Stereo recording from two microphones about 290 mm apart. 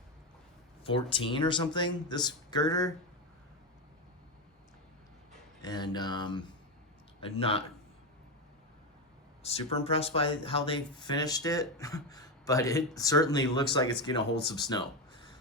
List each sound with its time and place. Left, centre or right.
0.9 s speech: centre
5.6 s speech: centre
9.4 s speech: left